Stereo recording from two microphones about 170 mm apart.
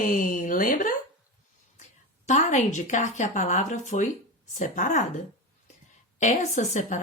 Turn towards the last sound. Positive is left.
turn(degrees=45)  # may be behind; listen again after turning